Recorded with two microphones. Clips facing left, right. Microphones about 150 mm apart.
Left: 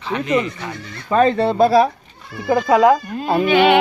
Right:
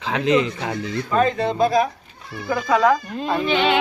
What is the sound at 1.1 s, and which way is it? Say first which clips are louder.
Speech: left 5 dB; 30° left (ahead or behind).